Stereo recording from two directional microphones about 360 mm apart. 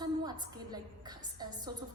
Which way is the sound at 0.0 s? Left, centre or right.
Centre.